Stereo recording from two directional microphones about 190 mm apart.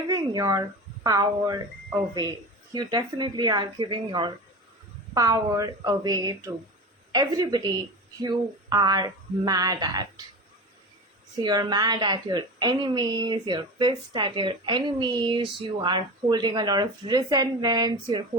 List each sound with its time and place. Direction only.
0.1 s a woman's voice: 20° right (ahead or behind)
2.7 s a woman's voice: 20° right (ahead or behind)
11.4 s a woman's voice: 20° right (ahead or behind)